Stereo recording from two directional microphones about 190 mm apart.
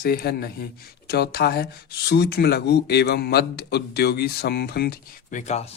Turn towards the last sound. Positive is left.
turn(degrees=35)  # may be behind; listen again after turning